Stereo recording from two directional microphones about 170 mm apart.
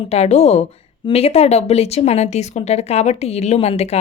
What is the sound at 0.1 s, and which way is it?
Speech, 40° left (ahead or behind).